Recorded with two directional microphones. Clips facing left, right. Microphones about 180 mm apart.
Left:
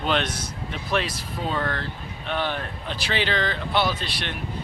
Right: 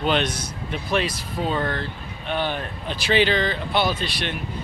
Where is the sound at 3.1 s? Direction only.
5° right (ahead or behind).